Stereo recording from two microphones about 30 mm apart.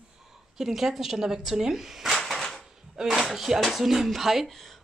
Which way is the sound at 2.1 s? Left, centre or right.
Centre.